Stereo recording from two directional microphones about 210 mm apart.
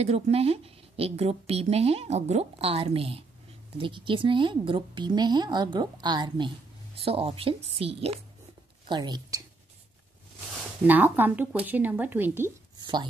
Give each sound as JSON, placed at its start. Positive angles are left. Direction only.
{"t": 0.0, "sound": "a woman's voice", "side_deg": -30}
{"t": 10.9, "sound": "speech", "side_deg": -10}